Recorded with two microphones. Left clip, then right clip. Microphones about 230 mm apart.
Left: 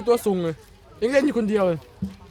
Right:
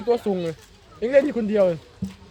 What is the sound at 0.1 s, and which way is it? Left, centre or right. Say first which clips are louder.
A man's voice: left 2 dB; left.